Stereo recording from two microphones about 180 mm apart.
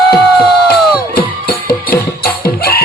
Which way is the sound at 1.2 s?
55° left (ahead or behind).